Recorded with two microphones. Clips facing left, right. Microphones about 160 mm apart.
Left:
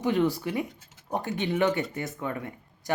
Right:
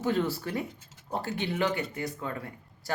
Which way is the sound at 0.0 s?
15° left (ahead or behind).